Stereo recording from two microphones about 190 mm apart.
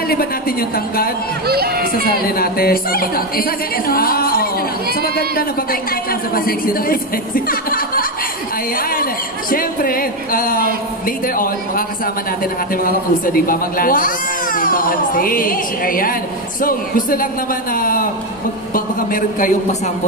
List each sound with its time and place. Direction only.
0.1 s speech: 50° left (ahead or behind)
1.5 s speech: 55° right (ahead or behind)
2.2 s a man's voice: 50° left (ahead or behind)